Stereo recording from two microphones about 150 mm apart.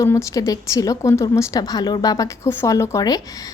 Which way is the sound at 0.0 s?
20° left (ahead or behind).